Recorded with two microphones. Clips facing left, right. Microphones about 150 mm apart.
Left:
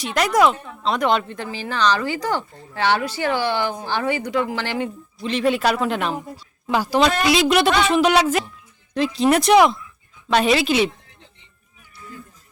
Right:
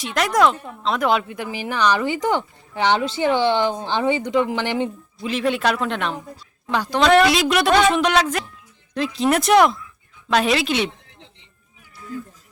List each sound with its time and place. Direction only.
0.0 s speech: centre (ahead or behind); by 5.3 s 15° right (ahead or behind)
5.3 s a woman's voice: centre (ahead or behind)